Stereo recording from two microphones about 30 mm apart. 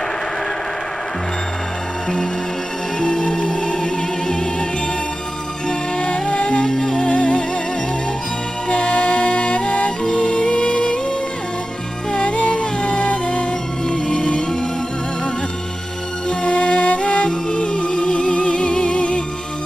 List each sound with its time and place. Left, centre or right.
3.0 s music: centre
5.7 s music: left
6.6 s music: centre
7.1 s music: left
8.6 s music: left
10.1 s music: left
12.3 s music: left
16.4 s music: left
18.1 s music: left
18.6 s music: left